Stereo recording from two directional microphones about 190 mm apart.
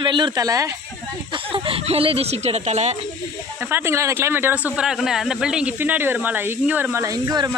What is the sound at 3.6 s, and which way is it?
Speech, 10° right (ahead or behind).